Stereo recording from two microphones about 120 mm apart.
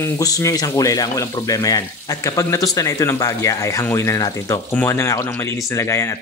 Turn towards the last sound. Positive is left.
turn(degrees=25)  # may be behind; listen again after turning